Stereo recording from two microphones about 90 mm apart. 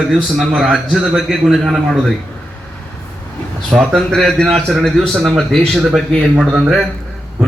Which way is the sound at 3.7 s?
Centre (ahead or behind).